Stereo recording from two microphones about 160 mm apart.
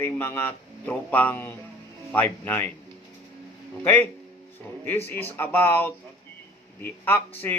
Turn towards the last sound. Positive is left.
turn(degrees=15)  # may be behind; listen again after turning